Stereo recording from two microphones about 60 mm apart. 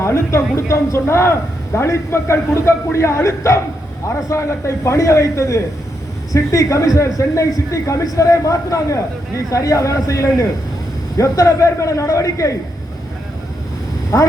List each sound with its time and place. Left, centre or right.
0.0 s a man's voice: left
14.1 s a man's voice: left